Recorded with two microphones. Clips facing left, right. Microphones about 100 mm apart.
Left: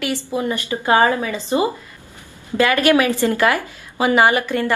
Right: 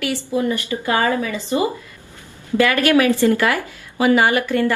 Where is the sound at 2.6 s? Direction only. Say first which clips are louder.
Even; 20° left (ahead or behind).